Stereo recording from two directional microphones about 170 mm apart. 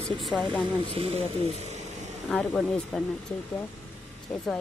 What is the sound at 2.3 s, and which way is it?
Speech, centre (ahead or behind).